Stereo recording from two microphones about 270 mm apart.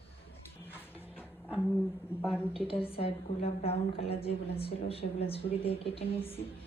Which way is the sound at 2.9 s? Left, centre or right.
Left.